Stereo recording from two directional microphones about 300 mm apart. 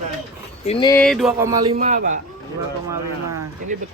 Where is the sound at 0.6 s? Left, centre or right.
Centre.